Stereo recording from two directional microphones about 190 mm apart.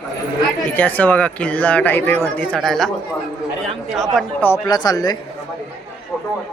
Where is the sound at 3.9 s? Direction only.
Centre (ahead or behind).